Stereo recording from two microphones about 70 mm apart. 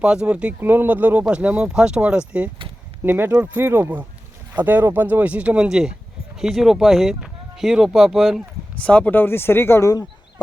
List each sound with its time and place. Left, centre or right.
0.0 s speech: centre
0.6 s speech: right
3.0 s speech: right; by 8.4 s centre
8.8 s speech: centre; by 9.9 s left